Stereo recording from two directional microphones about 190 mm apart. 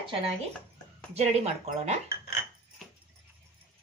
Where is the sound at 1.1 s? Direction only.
35° right (ahead or behind).